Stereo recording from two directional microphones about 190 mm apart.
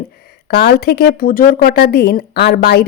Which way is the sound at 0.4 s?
55° left (ahead or behind).